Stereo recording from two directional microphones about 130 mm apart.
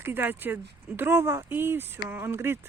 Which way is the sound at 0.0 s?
15° right (ahead or behind).